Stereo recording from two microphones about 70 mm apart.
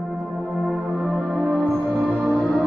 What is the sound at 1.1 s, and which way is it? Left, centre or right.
Music, centre.